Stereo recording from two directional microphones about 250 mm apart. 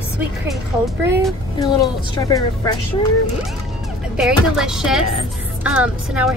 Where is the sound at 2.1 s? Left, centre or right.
Centre.